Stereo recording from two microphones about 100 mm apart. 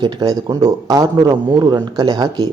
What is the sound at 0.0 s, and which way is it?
Speech, 45° right (ahead or behind).